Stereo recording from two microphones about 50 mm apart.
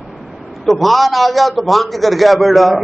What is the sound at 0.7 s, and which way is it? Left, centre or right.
A man's voice, centre.